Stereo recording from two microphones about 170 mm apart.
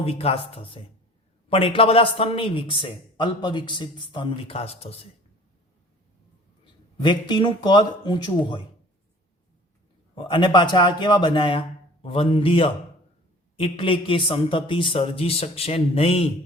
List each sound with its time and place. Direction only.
0.0 s a man's voice: 35° left (ahead or behind)
6.9 s speech: 30° left (ahead or behind)
10.2 s a man's voice: 30° left (ahead or behind)